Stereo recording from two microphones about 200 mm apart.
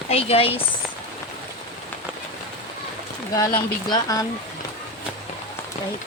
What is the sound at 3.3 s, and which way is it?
Speech, 15° left (ahead or behind).